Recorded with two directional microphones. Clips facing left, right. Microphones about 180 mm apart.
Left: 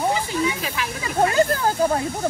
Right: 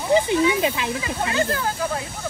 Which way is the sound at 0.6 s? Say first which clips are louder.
Right 5 dB; 25° right (ahead or behind).